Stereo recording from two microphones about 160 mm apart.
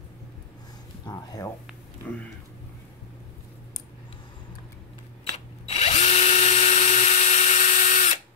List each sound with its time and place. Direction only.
1.0 s speech: 20° left (ahead or behind)
5.3 s drill: 45° left (ahead or behind)